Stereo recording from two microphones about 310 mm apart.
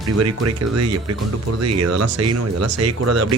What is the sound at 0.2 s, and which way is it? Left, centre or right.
Speech, right.